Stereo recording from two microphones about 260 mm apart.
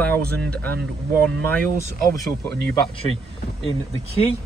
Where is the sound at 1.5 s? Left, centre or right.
Centre.